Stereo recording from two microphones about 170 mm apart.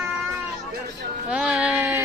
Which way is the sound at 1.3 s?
5° right (ahead or behind).